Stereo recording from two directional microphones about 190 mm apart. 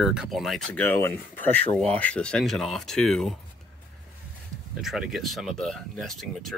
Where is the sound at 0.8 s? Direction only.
10° left (ahead or behind).